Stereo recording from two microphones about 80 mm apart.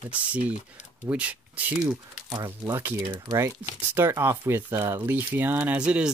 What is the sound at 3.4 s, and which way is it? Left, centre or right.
Speech, right.